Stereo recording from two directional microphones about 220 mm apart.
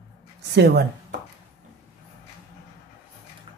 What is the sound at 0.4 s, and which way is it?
Speech, 50° right (ahead or behind).